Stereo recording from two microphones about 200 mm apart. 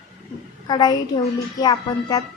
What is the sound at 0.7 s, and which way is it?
A child's voice, 20° left (ahead or behind).